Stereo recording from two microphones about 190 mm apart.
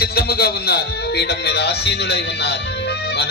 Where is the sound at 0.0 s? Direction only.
55° left (ahead or behind).